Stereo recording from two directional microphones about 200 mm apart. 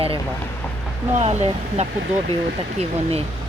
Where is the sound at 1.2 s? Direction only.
35° right (ahead or behind).